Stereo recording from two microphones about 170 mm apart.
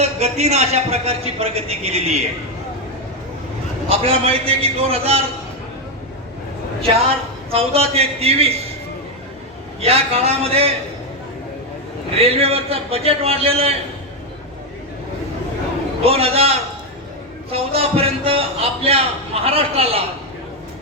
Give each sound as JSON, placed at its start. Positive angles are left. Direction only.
{"t": 0.0, "sound": "a man's voice", "side_deg": -40}
{"t": 3.8, "sound": "a man's voice", "side_deg": -35}
{"t": 7.5, "sound": "a man's voice", "side_deg": -35}
{"t": 9.8, "sound": "a man's voice", "side_deg": -35}
{"t": 12.2, "sound": "a man's voice", "side_deg": -35}
{"t": 16.0, "sound": "a man's voice", "side_deg": -35}